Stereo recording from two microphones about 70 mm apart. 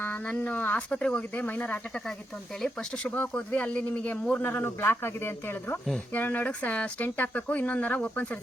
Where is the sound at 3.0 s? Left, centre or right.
Centre.